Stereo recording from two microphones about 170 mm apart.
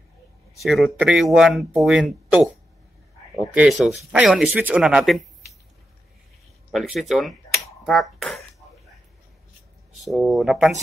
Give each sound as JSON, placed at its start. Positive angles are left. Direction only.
{"t": 0.6, "sound": "speech", "side_deg": 0}
{"t": 3.5, "sound": "speech", "side_deg": 0}
{"t": 6.7, "sound": "speech", "side_deg": 0}
{"t": 7.8, "sound": "a sound", "side_deg": 0}
{"t": 9.9, "sound": "speech", "side_deg": 0}